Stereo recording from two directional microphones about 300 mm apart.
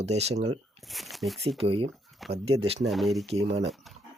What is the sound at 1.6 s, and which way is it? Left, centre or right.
Speech, centre.